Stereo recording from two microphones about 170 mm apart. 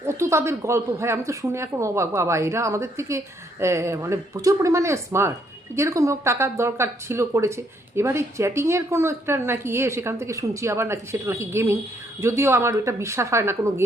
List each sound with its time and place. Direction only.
0.0 s speech: 15° right (ahead or behind)